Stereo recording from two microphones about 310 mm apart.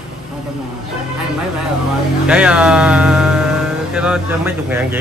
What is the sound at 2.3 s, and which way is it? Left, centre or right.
Speech, centre.